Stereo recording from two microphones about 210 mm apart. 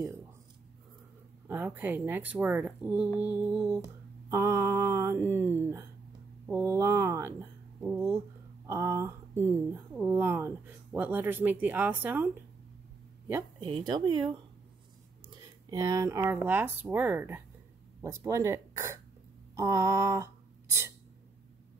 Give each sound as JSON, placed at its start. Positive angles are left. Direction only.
{"t": 1.5, "sound": "mantra", "side_deg": -10}
{"t": 6.4, "sound": "speech", "side_deg": -10}
{"t": 9.9, "sound": "mantra", "side_deg": -10}
{"t": 13.3, "sound": "speech", "side_deg": -20}
{"t": 15.7, "sound": "mantra", "side_deg": -15}
{"t": 18.0, "sound": "speech", "side_deg": -15}